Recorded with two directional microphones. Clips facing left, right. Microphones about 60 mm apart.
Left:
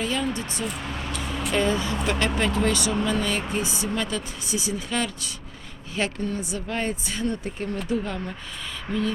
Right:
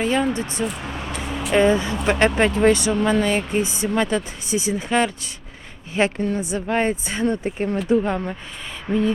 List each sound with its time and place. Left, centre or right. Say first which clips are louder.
0.0 s a sound: right 6 dB; right
0.3 s a woman's voice: right 5 dB; right
0.6 s speech: right 5 dB; centre
0.9 s speech: right 2 dB; centre
1.5 s a woman's voice: right 7 dB; right